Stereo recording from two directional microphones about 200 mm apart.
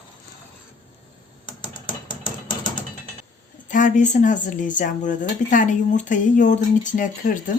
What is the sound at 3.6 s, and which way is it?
Speech, 40° left (ahead or behind).